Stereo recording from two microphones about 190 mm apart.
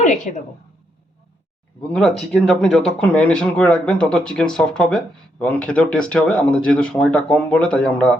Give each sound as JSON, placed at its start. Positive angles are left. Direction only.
{"t": 0.3, "sound": "a woman's voice", "side_deg": 45}
{"t": 1.9, "sound": "speech", "side_deg": 5}